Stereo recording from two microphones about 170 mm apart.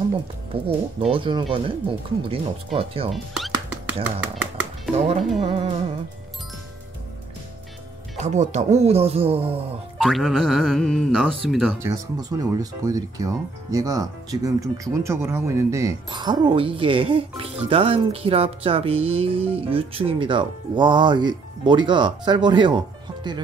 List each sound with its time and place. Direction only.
0.7 s speech: 30° right (ahead or behind)
3.1 s cat: centre (ahead or behind)
4.9 s speech: 40° right (ahead or behind)
8.2 s speech: 45° right (ahead or behind)
9.9 s speech: centre (ahead or behind)
11.8 s speech: 20° right (ahead or behind)